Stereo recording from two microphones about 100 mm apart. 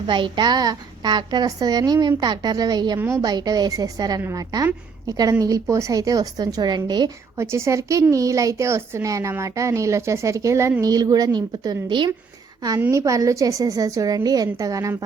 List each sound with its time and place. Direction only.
0.1 s a woman's voice: 50° right (ahead or behind)
7.3 s a woman's voice: 25° right (ahead or behind); by 12.1 s 50° right (ahead or behind)
12.9 s a woman's voice: 30° right (ahead or behind)